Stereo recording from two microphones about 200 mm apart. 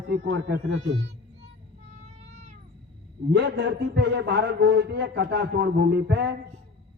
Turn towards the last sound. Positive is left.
turn(degrees=-55)  # may be behind; listen again after turning